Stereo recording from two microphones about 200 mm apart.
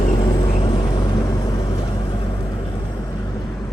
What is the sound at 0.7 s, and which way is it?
Vehicle, 20° left (ahead or behind).